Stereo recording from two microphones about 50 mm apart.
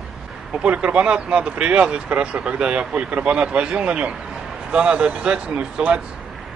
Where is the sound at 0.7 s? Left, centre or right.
Right.